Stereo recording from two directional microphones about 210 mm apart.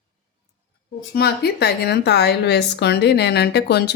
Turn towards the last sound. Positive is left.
turn(degrees=50)  # may be behind; listen again after turning